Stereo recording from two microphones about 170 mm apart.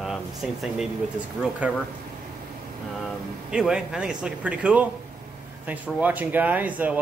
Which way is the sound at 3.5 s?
5° right (ahead or behind).